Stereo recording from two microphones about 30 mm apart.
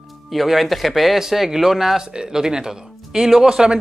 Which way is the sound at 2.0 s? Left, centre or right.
Right.